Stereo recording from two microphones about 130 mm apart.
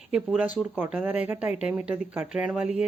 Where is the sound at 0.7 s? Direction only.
15° right (ahead or behind).